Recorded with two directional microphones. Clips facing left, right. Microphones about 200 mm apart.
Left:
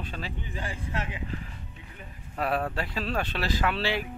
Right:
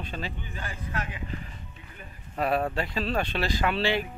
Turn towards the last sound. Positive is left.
turn(degrees=5)  # may be behind; listen again after turning